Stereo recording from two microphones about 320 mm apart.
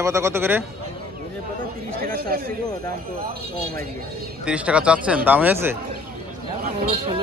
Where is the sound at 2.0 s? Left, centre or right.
Right.